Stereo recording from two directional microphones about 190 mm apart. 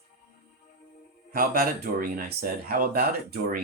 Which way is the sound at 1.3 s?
50° right (ahead or behind).